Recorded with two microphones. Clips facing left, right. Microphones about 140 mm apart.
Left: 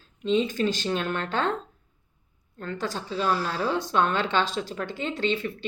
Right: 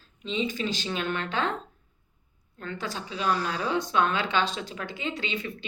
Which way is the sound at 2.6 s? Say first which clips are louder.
Left 3 dB; 40° left (ahead or behind).